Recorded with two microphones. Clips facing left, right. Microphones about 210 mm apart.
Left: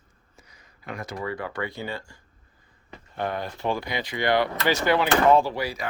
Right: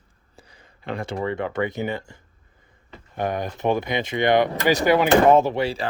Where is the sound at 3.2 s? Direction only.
15° right (ahead or behind).